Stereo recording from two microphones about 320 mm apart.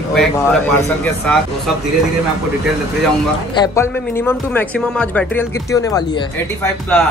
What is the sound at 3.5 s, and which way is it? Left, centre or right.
Speech, centre.